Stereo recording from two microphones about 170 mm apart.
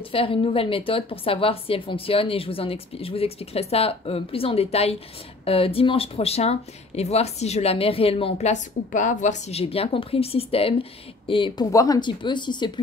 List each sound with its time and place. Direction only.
0.0 s speech: 30° left (ahead or behind)